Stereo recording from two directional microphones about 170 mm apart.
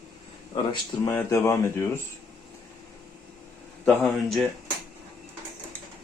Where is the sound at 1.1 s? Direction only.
15° left (ahead or behind).